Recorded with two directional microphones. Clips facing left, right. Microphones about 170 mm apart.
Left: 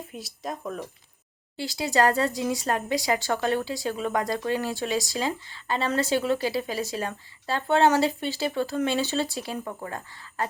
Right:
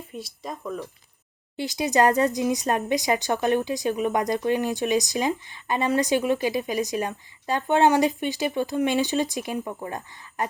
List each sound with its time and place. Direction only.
0.1 s speech: centre (ahead or behind)
1.5 s speech: 20° right (ahead or behind)